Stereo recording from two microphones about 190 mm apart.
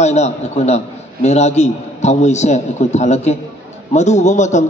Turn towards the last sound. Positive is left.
turn(degrees=40)  # may be behind; listen again after turning